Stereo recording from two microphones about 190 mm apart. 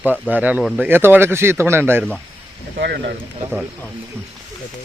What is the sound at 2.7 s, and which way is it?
Speech, 60° right (ahead or behind).